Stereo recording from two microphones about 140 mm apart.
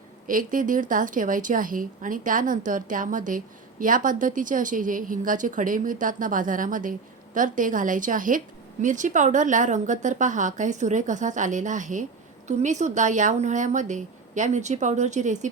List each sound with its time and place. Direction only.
0.3 s a woman's voice: 75° right (ahead or behind)